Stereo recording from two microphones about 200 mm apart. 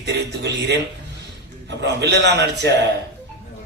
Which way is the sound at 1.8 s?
55° right (ahead or behind).